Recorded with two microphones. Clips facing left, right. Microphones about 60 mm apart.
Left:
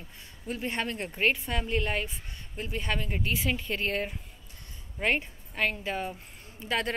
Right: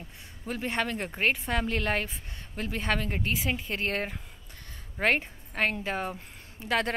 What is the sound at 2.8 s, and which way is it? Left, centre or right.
A woman's voice, right.